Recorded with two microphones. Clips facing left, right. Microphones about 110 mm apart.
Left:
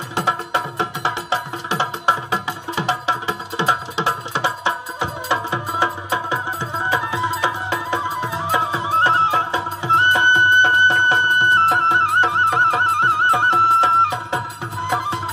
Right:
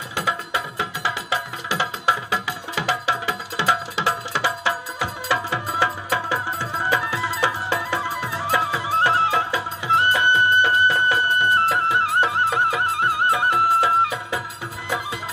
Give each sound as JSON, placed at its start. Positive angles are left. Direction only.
{"t": 0.3, "sound": "music", "side_deg": 30}